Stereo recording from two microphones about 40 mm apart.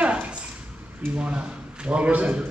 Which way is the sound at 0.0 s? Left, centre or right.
Right.